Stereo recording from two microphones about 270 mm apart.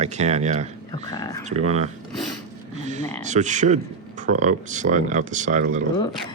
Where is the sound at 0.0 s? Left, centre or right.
Right.